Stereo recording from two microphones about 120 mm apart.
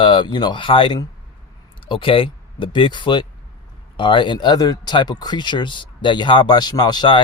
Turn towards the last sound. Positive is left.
turn(degrees=40)  # may be behind; listen again after turning